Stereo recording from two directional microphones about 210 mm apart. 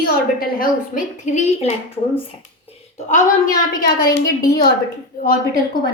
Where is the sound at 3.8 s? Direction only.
50° left (ahead or behind).